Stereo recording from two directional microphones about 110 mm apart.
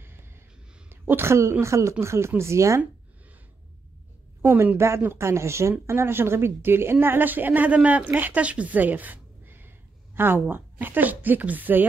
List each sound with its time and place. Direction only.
0.8 s speech: 20° right (ahead or behind)
4.4 s speech: 20° right (ahead or behind)